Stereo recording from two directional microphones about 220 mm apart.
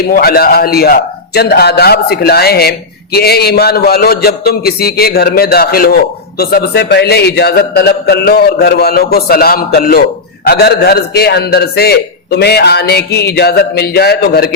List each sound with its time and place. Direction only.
0.1 s a man's voice: 45° left (ahead or behind)